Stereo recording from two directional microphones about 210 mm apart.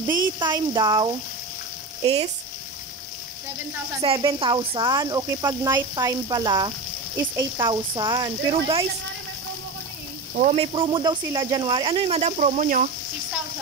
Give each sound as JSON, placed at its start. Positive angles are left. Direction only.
{"t": 0.4, "sound": "speech", "side_deg": -20}
{"t": 4.0, "sound": "speech", "side_deg": -20}
{"t": 10.3, "sound": "speech", "side_deg": -30}